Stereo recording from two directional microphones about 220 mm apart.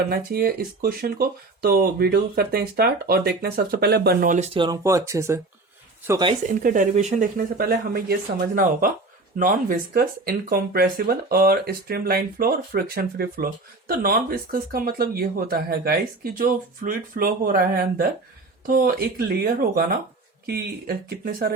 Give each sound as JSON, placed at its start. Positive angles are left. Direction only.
{"t": 0.1, "sound": "speech", "side_deg": -40}
{"t": 6.4, "sound": "speech", "side_deg": -35}